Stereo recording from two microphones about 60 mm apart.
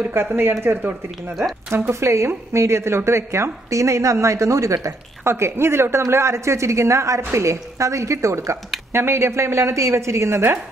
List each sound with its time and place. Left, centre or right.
0.1 s speech: right
1.9 s speech: right
3.7 s speech: right
5.2 s speech: right
8.9 s speech: right